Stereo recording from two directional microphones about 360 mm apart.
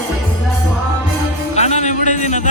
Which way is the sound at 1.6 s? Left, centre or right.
Centre.